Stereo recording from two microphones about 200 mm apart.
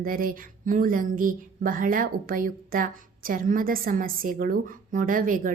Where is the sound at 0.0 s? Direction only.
45° right (ahead or behind).